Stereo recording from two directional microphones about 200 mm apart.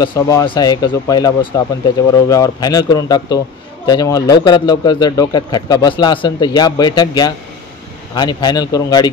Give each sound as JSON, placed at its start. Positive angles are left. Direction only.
{"t": 0.0, "sound": "a man's voice", "side_deg": 20}